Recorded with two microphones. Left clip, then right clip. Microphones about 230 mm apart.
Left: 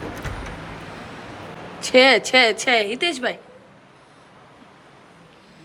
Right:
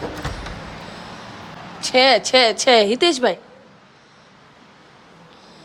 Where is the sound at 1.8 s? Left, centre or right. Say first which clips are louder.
Even; centre.